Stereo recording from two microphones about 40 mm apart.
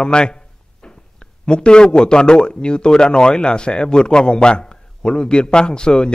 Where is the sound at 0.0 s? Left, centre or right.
Left.